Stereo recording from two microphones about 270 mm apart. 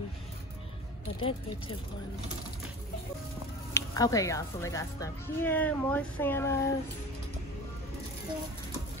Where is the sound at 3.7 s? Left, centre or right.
Centre.